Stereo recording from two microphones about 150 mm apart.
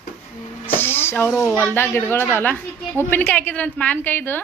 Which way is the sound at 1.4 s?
15° left (ahead or behind).